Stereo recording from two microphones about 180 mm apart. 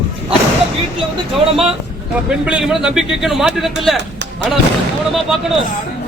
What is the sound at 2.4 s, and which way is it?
A man's voice, 5° right (ahead or behind).